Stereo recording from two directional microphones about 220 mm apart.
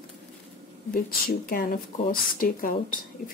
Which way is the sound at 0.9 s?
40° left (ahead or behind).